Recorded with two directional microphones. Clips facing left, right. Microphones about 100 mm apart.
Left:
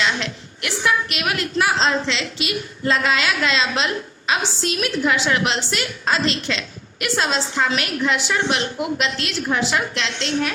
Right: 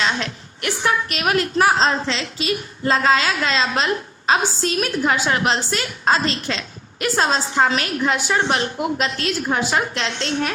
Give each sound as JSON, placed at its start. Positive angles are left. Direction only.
{"t": 0.6, "sound": "a woman's voice", "side_deg": -35}